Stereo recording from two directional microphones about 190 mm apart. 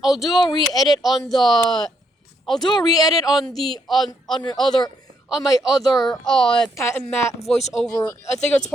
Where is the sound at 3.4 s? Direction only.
Centre (ahead or behind).